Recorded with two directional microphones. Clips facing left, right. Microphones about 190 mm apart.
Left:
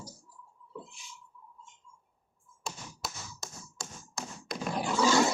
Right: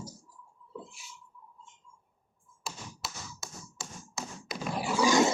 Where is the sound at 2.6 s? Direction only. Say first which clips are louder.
Left 1 dB; centre (ahead or behind).